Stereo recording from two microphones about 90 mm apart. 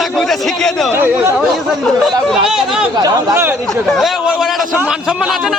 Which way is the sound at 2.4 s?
5° right (ahead or behind).